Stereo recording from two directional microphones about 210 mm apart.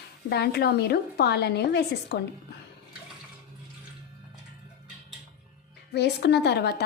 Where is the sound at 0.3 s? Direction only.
50° left (ahead or behind).